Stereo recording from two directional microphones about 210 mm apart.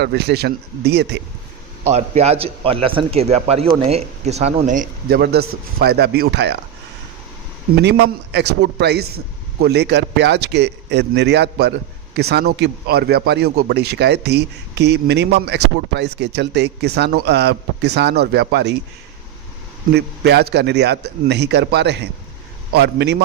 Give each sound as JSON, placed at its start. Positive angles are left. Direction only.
{"t": 0.0, "sound": "speech", "side_deg": -50}
{"t": 1.9, "sound": "a man's voice", "side_deg": -30}
{"t": 7.8, "sound": "speech", "side_deg": -55}
{"t": 19.9, "sound": "speech", "side_deg": -50}